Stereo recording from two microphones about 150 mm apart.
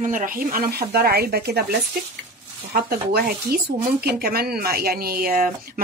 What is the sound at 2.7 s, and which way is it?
Speech, 90° right.